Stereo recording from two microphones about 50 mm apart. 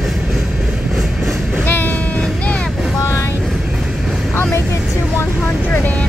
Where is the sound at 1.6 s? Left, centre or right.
Left.